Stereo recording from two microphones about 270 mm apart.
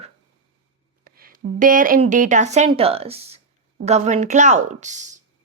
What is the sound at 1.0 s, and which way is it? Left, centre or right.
A woman's voice, right.